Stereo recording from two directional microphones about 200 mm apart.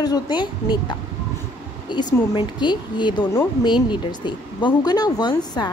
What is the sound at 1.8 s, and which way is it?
Speech, 20° left (ahead or behind).